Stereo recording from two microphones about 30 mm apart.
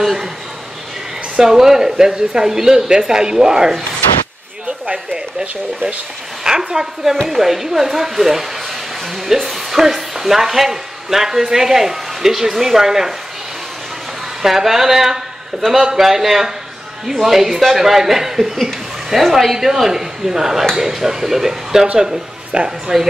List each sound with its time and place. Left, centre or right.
0.0 s a sound: centre
1.4 s speech: centre
6.6 s speech: centre
14.4 s speech: centre
22.5 s speech: right